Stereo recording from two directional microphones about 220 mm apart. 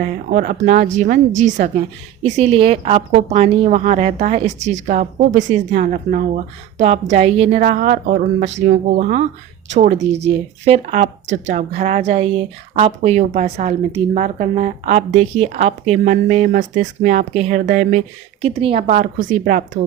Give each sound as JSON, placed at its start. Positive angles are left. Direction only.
{"t": 0.0, "sound": "a woman's voice", "side_deg": -35}